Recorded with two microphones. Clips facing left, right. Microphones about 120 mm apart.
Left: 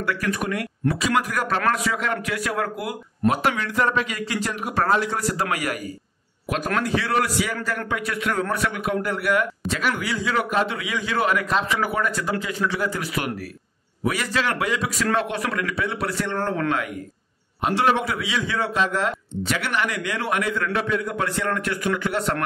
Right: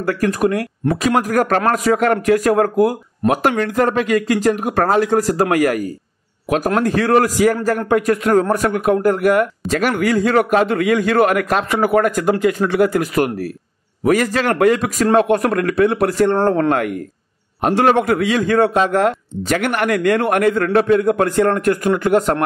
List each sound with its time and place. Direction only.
0.0 s speech: 45° right (ahead or behind)